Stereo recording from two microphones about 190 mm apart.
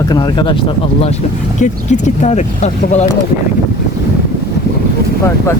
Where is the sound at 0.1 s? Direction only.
25° left (ahead or behind).